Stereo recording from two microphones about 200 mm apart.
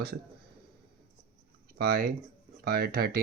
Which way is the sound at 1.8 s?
50° right (ahead or behind).